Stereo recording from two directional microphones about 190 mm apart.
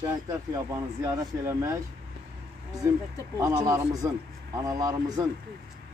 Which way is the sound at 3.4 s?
15° right (ahead or behind).